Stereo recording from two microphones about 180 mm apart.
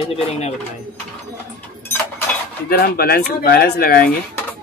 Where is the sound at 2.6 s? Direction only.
55° left (ahead or behind).